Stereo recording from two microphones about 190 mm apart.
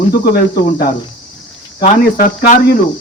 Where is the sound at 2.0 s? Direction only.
45° left (ahead or behind).